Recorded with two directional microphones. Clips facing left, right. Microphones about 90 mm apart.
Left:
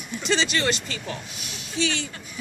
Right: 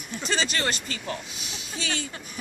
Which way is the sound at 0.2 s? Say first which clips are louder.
Left 3 dB; 40° right (ahead or behind).